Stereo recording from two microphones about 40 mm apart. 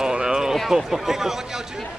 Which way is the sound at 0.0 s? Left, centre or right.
Centre.